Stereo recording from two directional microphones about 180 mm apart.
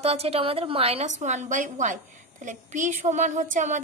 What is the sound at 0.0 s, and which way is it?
A woman's voice, 35° right (ahead or behind).